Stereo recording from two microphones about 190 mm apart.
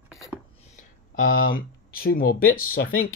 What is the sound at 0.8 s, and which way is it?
Speech, 50° left (ahead or behind).